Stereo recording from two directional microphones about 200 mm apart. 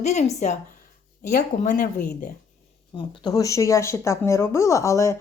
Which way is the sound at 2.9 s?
20° left (ahead or behind).